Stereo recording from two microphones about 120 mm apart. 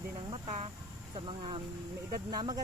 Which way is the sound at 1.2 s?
45° right (ahead or behind).